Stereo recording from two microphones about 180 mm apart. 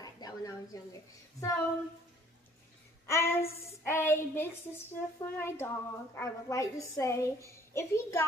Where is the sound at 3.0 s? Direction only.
15° left (ahead or behind).